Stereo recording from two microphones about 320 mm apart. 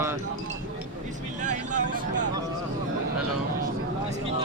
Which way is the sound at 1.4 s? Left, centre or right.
Right.